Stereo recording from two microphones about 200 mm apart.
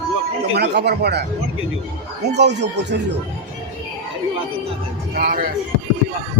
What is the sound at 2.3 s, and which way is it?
Speech, 60° right (ahead or behind).